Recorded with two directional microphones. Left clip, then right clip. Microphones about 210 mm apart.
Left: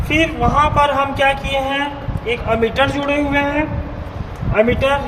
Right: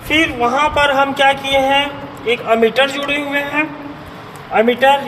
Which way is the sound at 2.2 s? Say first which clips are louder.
Right 4 dB; 30° left (ahead or behind).